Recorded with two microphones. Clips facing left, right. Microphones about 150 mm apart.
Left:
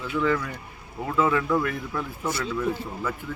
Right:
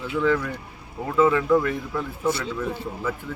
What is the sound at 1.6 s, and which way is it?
Speech, 20° right (ahead or behind).